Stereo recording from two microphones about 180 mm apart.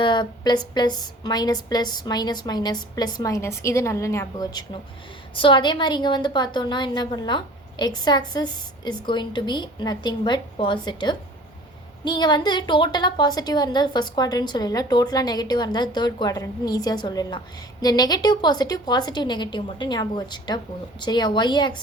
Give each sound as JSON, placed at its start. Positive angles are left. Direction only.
{"t": 0.0, "sound": "a woman's voice", "side_deg": 25}